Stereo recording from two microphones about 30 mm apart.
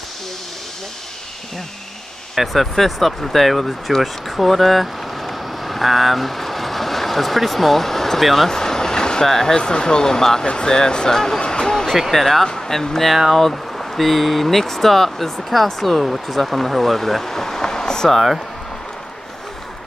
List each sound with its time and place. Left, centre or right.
2.3 s speech: centre
4.0 s vehicle: centre
8.5 s vehicle: centre
9.2 s speech: centre
9.6 s speech: left
10.4 s speech: left
12.1 s speech: centre
12.4 s speech: centre